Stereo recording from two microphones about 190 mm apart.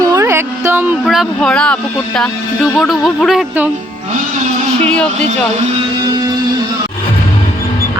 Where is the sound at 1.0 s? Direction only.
Centre (ahead or behind).